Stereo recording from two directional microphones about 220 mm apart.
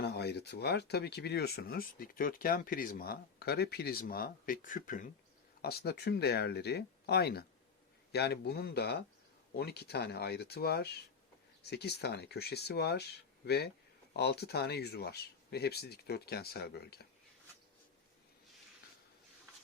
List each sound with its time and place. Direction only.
0.0 s speech: 50° left (ahead or behind)